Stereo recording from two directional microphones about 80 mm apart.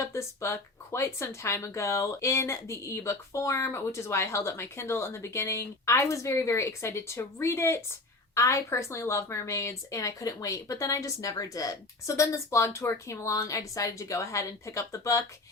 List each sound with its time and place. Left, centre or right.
0.0 s speech: left